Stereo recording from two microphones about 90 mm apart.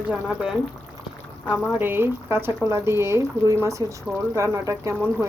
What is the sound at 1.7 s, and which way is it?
Speech, 25° right (ahead or behind).